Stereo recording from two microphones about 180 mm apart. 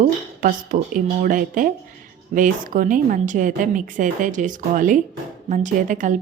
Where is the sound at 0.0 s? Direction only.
45° right (ahead or behind).